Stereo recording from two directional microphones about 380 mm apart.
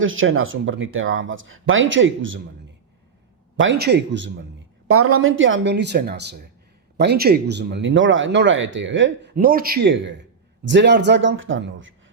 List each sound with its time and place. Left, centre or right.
0.0 s speech: right
3.6 s speech: right